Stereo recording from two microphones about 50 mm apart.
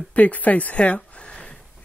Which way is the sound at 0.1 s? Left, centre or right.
Left.